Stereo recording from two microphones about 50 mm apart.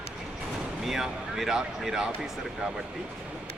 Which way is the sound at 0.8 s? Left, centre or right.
Centre.